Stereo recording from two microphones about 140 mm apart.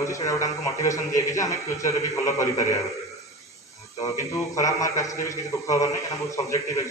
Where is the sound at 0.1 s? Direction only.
25° left (ahead or behind).